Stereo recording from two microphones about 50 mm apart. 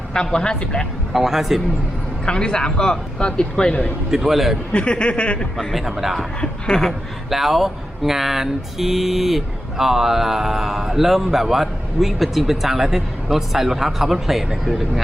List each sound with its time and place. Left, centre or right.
0.1 s a man's voice: centre
1.1 s a man's voice: centre
2.2 s a man's voice: centre
4.1 s a man's voice: centre
4.7 s speech: left
5.5 s a man's voice: centre